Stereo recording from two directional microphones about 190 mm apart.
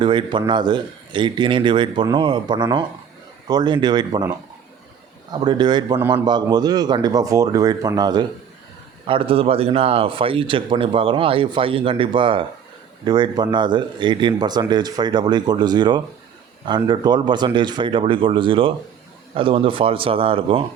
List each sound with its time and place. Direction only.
0.0 s speech: 25° right (ahead or behind)
5.3 s speech: 25° right (ahead or behind)